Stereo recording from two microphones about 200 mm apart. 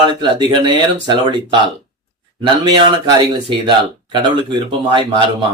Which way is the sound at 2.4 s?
20° right (ahead or behind).